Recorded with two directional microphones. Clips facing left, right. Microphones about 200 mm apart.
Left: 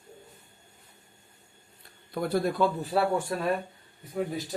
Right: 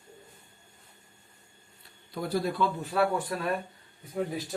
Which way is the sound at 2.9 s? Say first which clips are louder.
Left 1 dB; 30° left (ahead or behind).